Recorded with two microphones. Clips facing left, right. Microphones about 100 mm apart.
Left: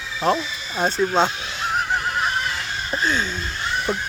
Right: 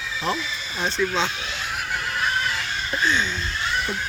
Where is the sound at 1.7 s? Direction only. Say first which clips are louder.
Left 7 dB; 35° left (ahead or behind).